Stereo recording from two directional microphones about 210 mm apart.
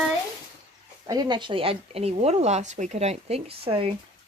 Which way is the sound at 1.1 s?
20° right (ahead or behind).